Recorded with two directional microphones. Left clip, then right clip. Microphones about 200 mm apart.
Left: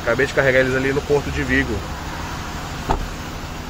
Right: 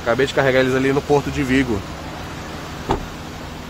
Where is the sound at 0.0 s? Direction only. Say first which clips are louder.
Even; 15° right (ahead or behind).